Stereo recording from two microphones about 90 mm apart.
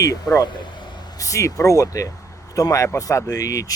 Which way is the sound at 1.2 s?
40° left (ahead or behind).